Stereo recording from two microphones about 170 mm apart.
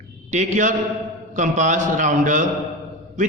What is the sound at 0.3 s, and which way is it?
A man's voice, 45° right (ahead or behind).